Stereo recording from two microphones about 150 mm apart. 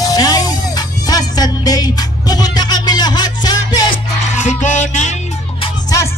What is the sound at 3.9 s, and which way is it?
Music, 55° left (ahead or behind).